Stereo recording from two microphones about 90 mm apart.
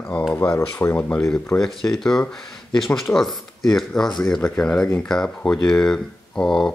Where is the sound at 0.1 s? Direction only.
65° left (ahead or behind).